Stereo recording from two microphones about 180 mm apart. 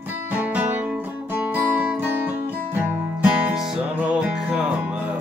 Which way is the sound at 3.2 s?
10° right (ahead or behind).